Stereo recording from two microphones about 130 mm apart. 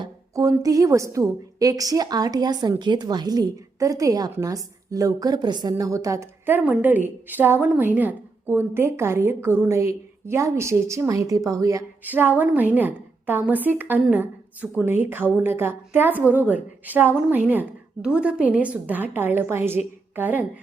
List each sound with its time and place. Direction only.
0.0 s a sound: 25° right (ahead or behind)
0.6 s a woman's voice: 25° right (ahead or behind)
12.0 s a woman's voice: 15° right (ahead or behind)